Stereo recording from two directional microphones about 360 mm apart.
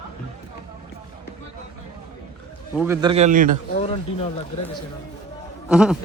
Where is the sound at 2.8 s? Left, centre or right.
Centre.